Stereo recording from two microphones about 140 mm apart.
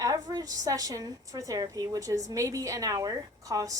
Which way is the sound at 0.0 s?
25° right (ahead or behind).